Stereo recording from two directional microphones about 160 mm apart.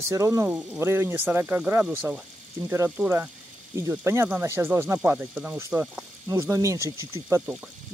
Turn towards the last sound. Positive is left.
turn(degrees=-15)  # may be behind; listen again after turning